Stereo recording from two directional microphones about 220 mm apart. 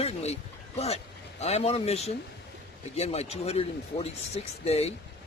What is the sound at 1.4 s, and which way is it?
Speech, 30° left (ahead or behind).